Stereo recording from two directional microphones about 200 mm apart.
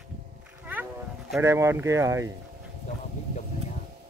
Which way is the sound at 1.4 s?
15° right (ahead or behind).